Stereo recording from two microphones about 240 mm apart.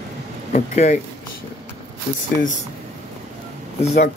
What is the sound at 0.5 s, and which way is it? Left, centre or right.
Speech, left.